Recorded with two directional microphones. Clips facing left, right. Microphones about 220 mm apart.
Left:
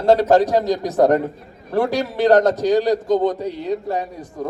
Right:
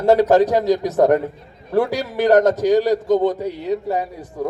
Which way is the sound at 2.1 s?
10° right (ahead or behind).